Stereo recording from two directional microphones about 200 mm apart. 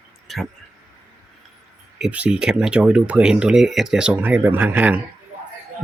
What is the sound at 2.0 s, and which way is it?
Speech, 5° right (ahead or behind).